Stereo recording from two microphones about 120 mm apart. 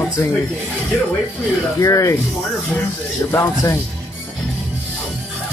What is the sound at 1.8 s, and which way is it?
Speech, 25° left (ahead or behind).